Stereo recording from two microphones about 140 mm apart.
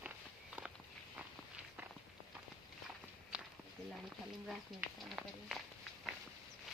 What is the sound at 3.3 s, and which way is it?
Walk, 5° right (ahead or behind).